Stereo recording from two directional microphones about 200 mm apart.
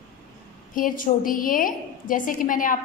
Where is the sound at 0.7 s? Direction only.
45° left (ahead or behind).